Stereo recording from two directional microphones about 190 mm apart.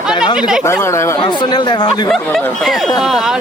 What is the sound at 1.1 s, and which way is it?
Speech, 25° left (ahead or behind).